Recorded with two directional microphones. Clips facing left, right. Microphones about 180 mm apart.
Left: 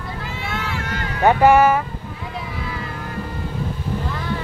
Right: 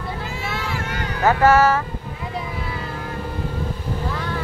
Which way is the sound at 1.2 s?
15° left (ahead or behind).